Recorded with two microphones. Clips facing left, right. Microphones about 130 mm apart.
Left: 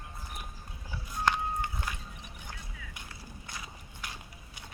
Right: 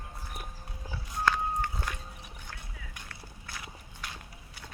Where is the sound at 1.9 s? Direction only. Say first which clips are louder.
Right 1 dB; 5° left (ahead or behind).